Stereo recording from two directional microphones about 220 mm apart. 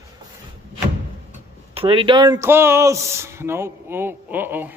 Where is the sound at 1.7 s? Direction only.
25° right (ahead or behind).